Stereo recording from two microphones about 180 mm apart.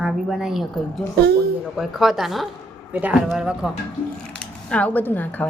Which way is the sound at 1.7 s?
Centre (ahead or behind).